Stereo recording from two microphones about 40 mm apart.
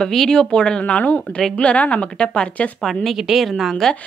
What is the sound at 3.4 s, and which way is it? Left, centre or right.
Speech, centre.